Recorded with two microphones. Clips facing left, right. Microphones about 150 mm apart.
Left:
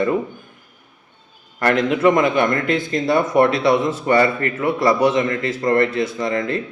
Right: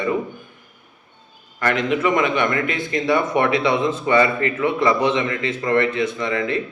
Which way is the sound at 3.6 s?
35° left (ahead or behind).